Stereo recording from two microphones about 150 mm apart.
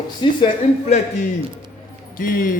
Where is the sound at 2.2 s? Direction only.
70° left (ahead or behind).